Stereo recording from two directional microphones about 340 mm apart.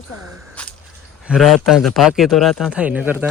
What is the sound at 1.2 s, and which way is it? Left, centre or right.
A man's voice, centre.